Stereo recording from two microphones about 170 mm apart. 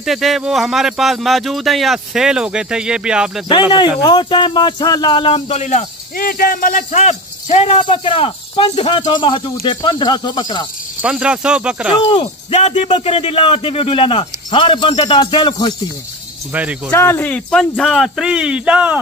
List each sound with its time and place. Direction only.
0.0 s speech: centre (ahead or behind)
4.0 s speech: 25° left (ahead or behind); by 5.9 s 45° left (ahead or behind)
6.1 s speech: 60° left (ahead or behind); by 10.7 s 25° left (ahead or behind)
11.0 s speech: 5° right (ahead or behind)
12.1 s speech: 35° left (ahead or behind)
16.5 s speech: 10° right (ahead or behind)
16.9 s speech: 15° left (ahead or behind); by 18.9 s 10° right (ahead or behind)